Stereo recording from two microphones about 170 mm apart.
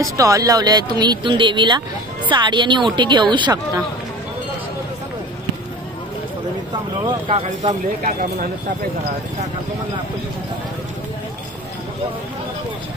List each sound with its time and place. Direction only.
0.0 s speech: 20° right (ahead or behind)
7.1 s speech: 35° right (ahead or behind); by 8.5 s 50° right (ahead or behind)